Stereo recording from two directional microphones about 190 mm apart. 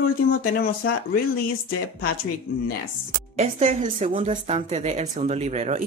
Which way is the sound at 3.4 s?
35° right (ahead or behind).